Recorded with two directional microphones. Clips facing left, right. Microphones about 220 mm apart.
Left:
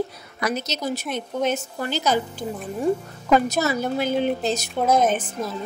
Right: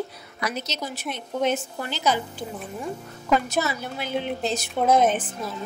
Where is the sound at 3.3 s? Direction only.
40° left (ahead or behind).